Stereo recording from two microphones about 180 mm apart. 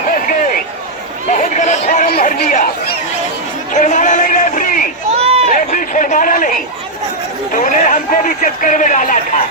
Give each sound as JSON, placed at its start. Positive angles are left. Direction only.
{"t": 1.3, "sound": "chatter", "side_deg": 45}
{"t": 3.8, "sound": "a man's voice", "side_deg": 40}
{"t": 5.1, "sound": "run", "side_deg": -35}
{"t": 5.5, "sound": "a sound", "side_deg": 45}
{"t": 7.6, "sound": "a man's voice", "side_deg": 45}